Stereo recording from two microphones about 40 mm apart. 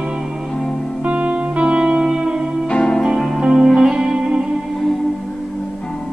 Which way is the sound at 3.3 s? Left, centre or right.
Centre.